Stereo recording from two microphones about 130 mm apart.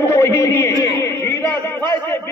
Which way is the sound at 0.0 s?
20° left (ahead or behind).